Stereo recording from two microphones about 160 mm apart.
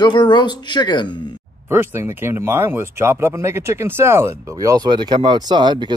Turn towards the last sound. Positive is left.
turn(degrees=-30)  # may be behind; listen again after turning